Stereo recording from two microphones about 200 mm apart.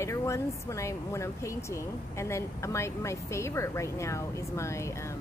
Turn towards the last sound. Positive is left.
turn(degrees=15)  # may be behind; listen again after turning